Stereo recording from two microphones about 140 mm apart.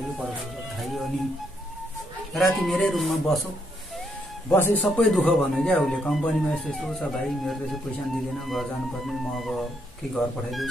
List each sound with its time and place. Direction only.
0.7 s speech: centre (ahead or behind)
2.3 s speech: centre (ahead or behind)
4.5 s speech: 15° left (ahead or behind); by 10.7 s centre (ahead or behind)